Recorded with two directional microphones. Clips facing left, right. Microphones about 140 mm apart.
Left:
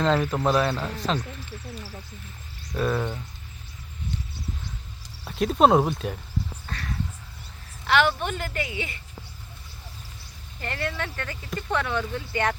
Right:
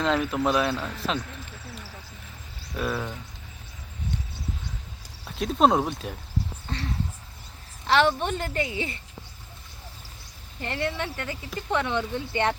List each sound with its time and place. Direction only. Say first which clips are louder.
0.0 s speech: left 1 dB; centre (ahead or behind)
2.7 s speech: left 4 dB; 5° right (ahead or behind)
5.3 s speech: left 3 dB; centre (ahead or behind)
6.7 s speech: right 2 dB; 25° right (ahead or behind)
10.6 s speech: right 2 dB; 20° right (ahead or behind)